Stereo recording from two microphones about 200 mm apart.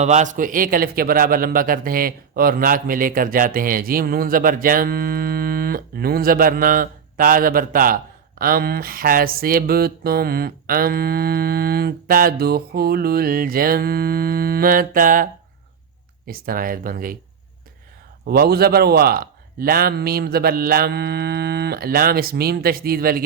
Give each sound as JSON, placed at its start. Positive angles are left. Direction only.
{"t": 0.0, "sound": "a man's voice", "side_deg": -35}
{"t": 18.3, "sound": "a man's voice", "side_deg": -50}